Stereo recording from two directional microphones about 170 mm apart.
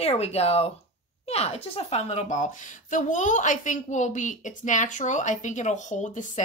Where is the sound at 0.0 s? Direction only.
35° left (ahead or behind).